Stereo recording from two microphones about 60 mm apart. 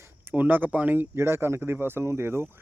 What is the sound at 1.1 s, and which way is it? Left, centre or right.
Speech, right.